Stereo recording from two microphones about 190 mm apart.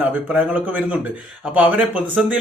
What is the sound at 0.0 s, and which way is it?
Speech, 5° right (ahead or behind).